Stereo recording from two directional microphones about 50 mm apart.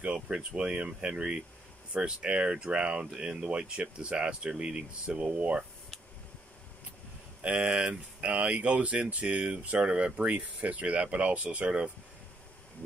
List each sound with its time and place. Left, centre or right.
0.3 s speech: right
7.4 s speech: right